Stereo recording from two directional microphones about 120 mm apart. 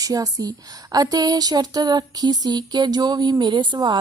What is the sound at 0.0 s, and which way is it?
A woman's voice, 30° right (ahead or behind).